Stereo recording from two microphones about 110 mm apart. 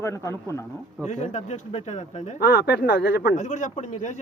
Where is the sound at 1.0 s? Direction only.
90° left.